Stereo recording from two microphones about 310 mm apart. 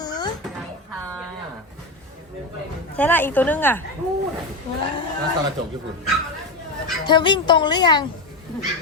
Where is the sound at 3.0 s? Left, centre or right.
Centre.